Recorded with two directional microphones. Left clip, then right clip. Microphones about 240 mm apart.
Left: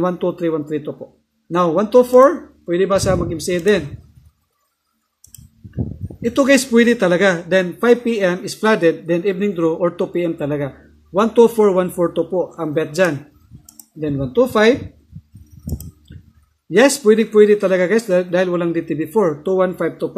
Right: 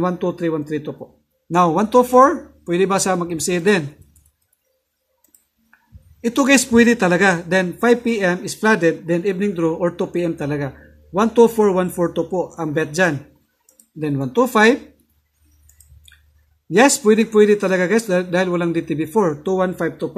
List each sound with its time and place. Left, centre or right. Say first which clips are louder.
0.0 s a man's voice: left 2 dB; centre
6.2 s a man's voice: left 2 dB; centre
16.7 s a man's voice: left 1 dB; centre